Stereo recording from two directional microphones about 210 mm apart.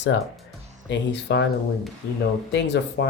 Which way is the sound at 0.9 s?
55° left (ahead or behind).